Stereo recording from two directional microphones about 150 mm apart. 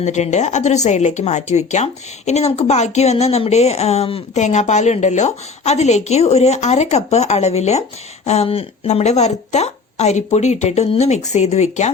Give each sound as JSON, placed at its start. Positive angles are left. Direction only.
{"t": 0.0, "sound": "speech", "side_deg": 50}